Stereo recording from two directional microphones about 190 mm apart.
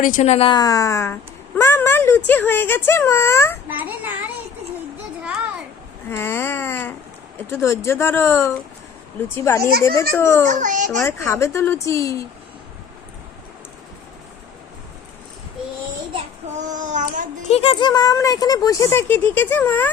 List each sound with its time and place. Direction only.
0.0 s speech: 40° left (ahead or behind); by 3.6 s 15° left (ahead or behind)
3.7 s a child's voice: 10° right (ahead or behind)
6.1 s speech: 10° left (ahead or behind)
10.4 s a child's voice: 40° right (ahead or behind)
11.0 s speech: 15° left (ahead or behind)
16.7 s a sound: 40° right (ahead or behind)
17.5 s speech: 30° left (ahead or behind); by 19.9 s 10° left (ahead or behind)